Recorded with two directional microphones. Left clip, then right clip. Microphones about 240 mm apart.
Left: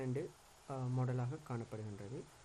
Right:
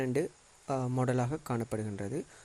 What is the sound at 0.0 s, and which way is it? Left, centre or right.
Speech, right.